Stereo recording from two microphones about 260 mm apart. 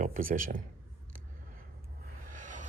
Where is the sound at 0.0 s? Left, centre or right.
Right.